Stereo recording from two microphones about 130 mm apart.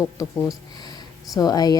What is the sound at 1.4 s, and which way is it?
Speech, 30° left (ahead or behind).